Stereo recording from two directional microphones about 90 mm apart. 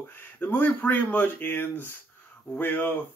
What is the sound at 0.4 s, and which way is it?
Speech, 20° left (ahead or behind).